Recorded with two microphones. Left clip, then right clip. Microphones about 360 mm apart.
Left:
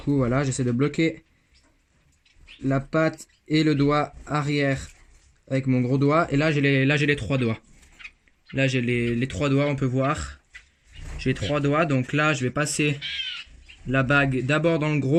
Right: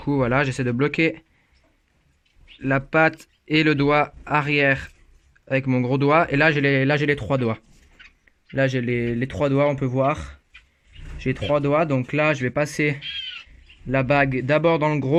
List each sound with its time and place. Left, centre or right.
0.0 s speech: right
2.6 s speech: right
11.5 s speech: centre